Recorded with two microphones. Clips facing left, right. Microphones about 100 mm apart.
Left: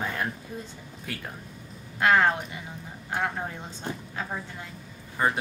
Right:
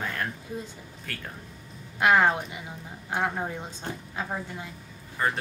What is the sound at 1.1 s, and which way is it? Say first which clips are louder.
Speech: left 3 dB; 10° left (ahead or behind).